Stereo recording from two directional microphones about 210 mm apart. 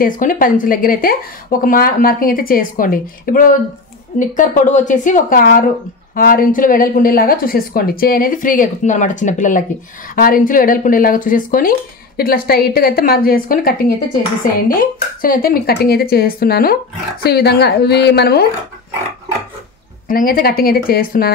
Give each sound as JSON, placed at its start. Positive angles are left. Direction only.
{"t": 0.0, "sound": "a woman's voice", "side_deg": 40}
{"t": 20.1, "sound": "a woman's voice", "side_deg": 40}